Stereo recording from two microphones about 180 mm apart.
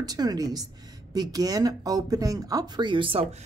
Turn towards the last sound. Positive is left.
turn(degrees=-30)  # may be behind; listen again after turning